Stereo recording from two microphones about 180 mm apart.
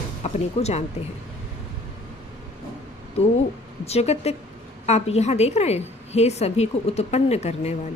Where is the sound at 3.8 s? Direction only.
35° left (ahead or behind).